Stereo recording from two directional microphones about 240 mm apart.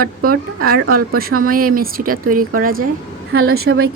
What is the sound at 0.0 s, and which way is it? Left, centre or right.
A woman's voice, right.